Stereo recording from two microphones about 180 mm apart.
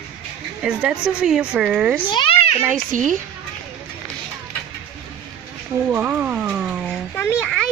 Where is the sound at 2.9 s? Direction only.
45° right (ahead or behind).